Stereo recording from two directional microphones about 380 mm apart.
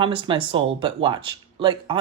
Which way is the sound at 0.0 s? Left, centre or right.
Centre.